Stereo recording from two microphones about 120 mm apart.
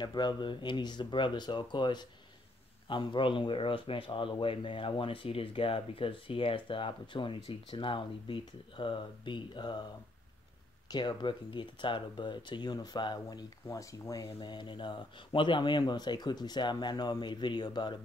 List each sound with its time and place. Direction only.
0.0 s speech: 35° left (ahead or behind)
10.9 s speech: 35° left (ahead or behind)